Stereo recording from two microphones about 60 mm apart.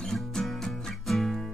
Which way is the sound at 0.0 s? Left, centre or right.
Centre.